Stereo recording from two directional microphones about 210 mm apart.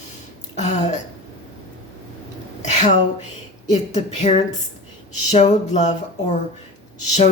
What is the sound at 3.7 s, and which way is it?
Speech, 35° left (ahead or behind).